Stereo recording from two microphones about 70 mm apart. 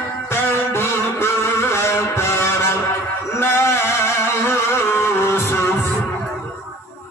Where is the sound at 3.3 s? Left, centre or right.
Left.